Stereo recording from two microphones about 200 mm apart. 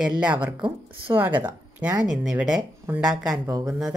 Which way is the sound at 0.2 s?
5° right (ahead or behind).